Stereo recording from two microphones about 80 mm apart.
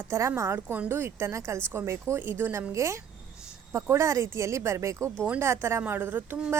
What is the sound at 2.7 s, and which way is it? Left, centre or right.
Speech, right.